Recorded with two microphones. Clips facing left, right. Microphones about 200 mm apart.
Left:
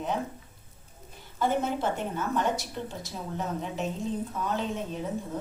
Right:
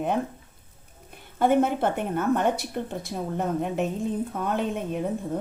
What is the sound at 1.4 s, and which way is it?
Speech, 60° right (ahead or behind).